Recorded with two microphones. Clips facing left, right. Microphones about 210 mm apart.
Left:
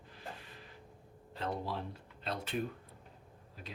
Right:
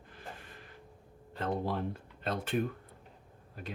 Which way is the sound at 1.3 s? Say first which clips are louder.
Right 5 dB; 50° right (ahead or behind).